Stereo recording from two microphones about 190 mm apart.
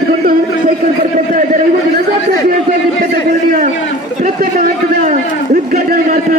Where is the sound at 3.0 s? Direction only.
45° right (ahead or behind).